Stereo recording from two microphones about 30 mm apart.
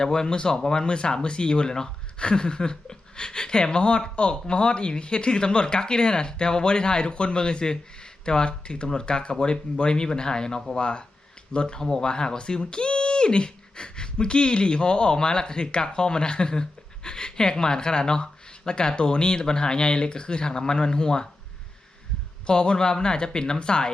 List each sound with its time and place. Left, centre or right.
0.0 s speech: left
22.4 s speech: left